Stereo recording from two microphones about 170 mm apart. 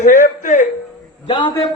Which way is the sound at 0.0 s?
50° left (ahead or behind).